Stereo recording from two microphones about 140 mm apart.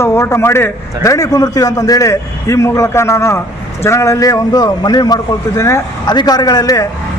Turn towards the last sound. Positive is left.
turn(degrees=25)  # may be behind; listen again after turning